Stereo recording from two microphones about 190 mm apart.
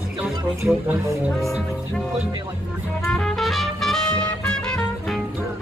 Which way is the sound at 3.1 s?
Centre (ahead or behind).